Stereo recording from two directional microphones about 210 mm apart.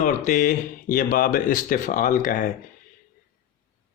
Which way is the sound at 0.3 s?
35° left (ahead or behind).